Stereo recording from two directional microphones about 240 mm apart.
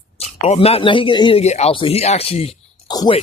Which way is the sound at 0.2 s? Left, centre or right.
Left.